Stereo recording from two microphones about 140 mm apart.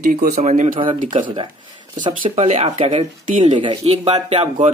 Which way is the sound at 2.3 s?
50° right (ahead or behind).